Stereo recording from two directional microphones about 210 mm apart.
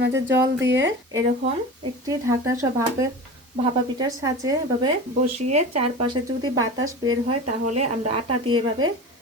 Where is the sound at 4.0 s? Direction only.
15° right (ahead or behind).